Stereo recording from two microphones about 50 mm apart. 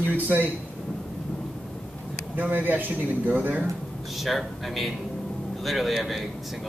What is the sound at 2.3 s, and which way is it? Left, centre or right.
A man's voice, right.